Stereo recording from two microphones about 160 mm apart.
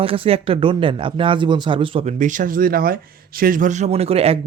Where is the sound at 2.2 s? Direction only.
55° right (ahead or behind).